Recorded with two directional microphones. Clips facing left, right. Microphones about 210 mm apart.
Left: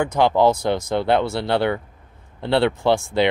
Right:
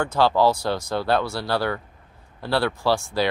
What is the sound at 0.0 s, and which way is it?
Speech, 20° left (ahead or behind).